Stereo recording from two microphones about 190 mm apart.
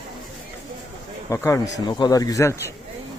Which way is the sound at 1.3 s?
15° left (ahead or behind).